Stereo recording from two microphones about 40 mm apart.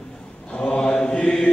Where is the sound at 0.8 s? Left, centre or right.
Left.